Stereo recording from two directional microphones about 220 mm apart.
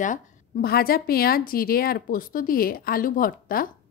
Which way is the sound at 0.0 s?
40° left (ahead or behind).